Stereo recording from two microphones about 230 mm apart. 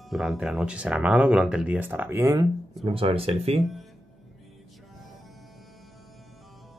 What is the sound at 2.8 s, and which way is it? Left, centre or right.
Speech, right.